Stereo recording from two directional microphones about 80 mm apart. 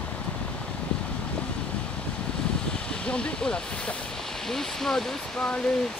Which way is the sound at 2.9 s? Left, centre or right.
Centre.